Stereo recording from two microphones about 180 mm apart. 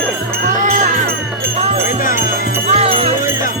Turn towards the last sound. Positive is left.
turn(degrees=-35)  # may be behind; listen again after turning